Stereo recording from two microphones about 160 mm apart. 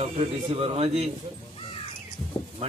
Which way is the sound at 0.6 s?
40° right (ahead or behind).